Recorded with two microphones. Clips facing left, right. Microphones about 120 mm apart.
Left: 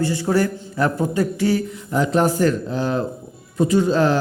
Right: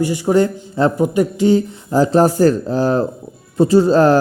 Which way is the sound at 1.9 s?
35° right (ahead or behind).